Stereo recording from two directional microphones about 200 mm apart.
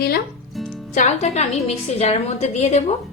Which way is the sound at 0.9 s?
35° left (ahead or behind).